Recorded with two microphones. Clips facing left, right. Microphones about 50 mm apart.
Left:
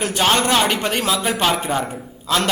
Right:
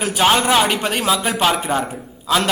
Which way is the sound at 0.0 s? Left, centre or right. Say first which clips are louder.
Right 2 dB; centre.